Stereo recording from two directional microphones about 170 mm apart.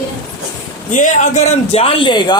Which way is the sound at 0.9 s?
45° left (ahead or behind).